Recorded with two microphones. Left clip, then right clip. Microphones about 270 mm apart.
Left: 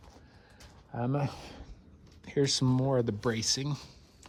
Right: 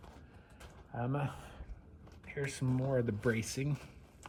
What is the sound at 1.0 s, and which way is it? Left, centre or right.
Speech, left.